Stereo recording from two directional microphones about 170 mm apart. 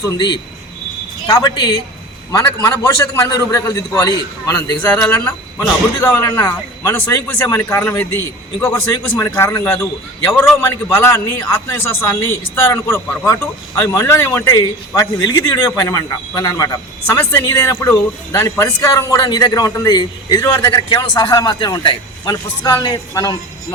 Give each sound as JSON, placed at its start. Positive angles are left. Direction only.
{"t": 1.3, "sound": "a man's voice", "side_deg": 20}